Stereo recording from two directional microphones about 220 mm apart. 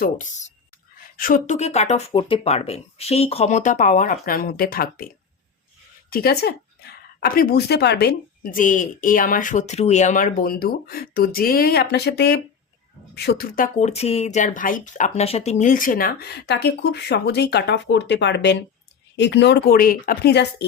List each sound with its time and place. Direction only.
0.0 s speech: 35° left (ahead or behind)
6.1 s a woman's voice: 45° left (ahead or behind)